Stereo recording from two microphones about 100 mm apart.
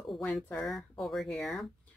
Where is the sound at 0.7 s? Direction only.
Centre (ahead or behind).